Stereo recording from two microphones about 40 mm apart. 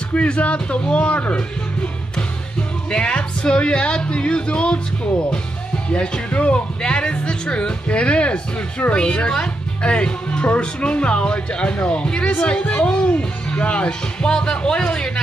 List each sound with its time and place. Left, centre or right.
0.1 s speech: left
2.9 s speech: left
5.9 s speech: left
6.8 s speech: left